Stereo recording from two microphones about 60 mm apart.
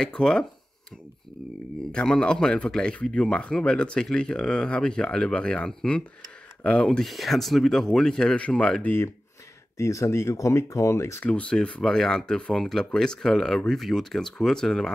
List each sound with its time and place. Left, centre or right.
0.0 s speech: centre
1.9 s speech: centre
7.1 s speech: centre
8.8 s speech: left
9.8 s speech: left
10.3 s speech: left
11.1 s speech: left
11.8 s speech: centre